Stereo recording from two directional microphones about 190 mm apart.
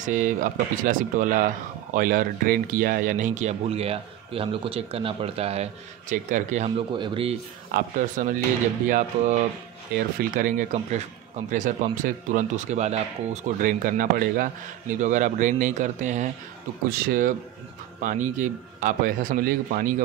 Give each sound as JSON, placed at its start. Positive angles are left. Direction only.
{"t": 0.0, "sound": "a man's voice", "side_deg": -45}
{"t": 6.9, "sound": "speech", "side_deg": -25}
{"t": 7.7, "sound": "a man's voice", "side_deg": -45}
{"t": 16.9, "sound": "a man's voice", "side_deg": -50}